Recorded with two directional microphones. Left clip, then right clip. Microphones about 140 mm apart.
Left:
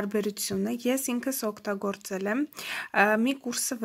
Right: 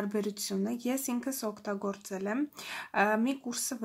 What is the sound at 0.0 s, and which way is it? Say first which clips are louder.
Speech: left 4 dB; 15° left (ahead or behind).